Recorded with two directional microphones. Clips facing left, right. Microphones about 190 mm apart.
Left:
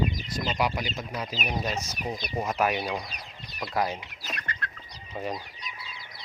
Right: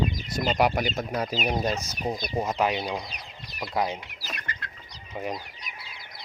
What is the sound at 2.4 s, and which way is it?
Speech, 20° right (ahead or behind).